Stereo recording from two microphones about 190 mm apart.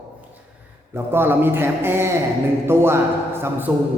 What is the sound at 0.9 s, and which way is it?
A man's voice, 10° right (ahead or behind).